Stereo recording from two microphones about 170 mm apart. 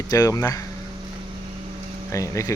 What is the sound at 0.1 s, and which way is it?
Speech, 20° left (ahead or behind).